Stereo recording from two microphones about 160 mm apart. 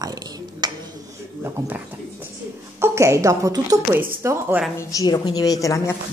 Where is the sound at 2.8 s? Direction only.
15° right (ahead or behind).